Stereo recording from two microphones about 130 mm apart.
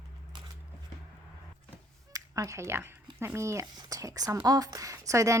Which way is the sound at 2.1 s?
25° right (ahead or behind).